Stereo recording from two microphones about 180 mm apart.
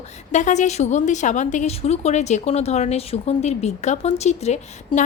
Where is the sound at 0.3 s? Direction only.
40° left (ahead or behind).